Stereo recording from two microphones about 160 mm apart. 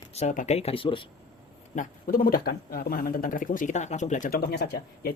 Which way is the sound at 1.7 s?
60° left (ahead or behind).